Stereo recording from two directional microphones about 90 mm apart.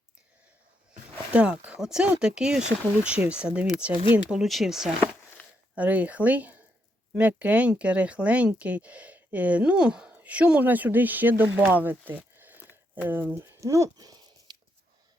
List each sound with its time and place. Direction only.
1.3 s speech: 15° right (ahead or behind)
5.7 s speech: 15° right (ahead or behind); by 14.5 s 45° right (ahead or behind)